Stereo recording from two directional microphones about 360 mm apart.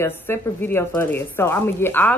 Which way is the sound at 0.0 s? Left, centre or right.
Centre.